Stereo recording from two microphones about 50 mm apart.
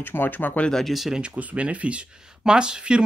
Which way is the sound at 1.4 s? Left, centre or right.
Right.